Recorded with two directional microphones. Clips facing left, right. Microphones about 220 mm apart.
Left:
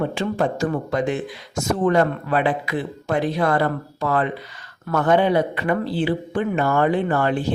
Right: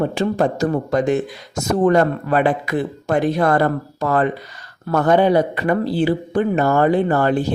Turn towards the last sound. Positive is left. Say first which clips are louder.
# right 3 dB
turn(degrees=-40)  # may be behind; listen again after turning